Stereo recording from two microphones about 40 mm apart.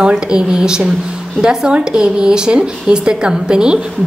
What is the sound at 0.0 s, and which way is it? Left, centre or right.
Speech, right.